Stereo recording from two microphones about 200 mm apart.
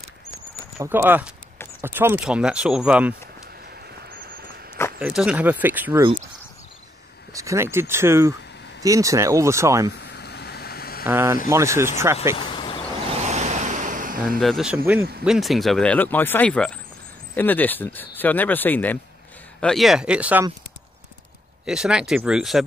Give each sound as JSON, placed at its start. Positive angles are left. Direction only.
{"t": 0.7, "sound": "speech", "side_deg": -10}
{"t": 4.1, "sound": "a sound", "side_deg": -45}
{"t": 5.0, "sound": "speech", "side_deg": -5}
{"t": 7.3, "sound": "speech", "side_deg": -15}
{"t": 9.9, "sound": "vehicle", "side_deg": 55}
{"t": 11.1, "sound": "speech", "side_deg": -10}
{"t": 12.4, "sound": "vehicle", "side_deg": 25}
{"t": 13.2, "sound": "vehicle", "side_deg": -35}
{"t": 14.4, "sound": "speech", "side_deg": 0}
{"t": 21.6, "sound": "speech", "side_deg": -5}